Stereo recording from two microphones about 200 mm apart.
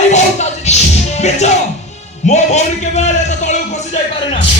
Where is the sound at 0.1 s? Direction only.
35° left (ahead or behind).